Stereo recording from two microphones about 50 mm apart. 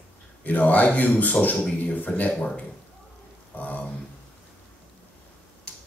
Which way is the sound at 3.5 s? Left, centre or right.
Left.